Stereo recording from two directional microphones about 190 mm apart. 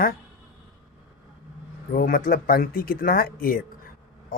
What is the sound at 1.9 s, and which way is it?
Speech, 50° left (ahead or behind).